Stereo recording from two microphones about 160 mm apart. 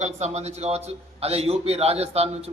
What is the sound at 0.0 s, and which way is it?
A man's voice, 45° right (ahead or behind).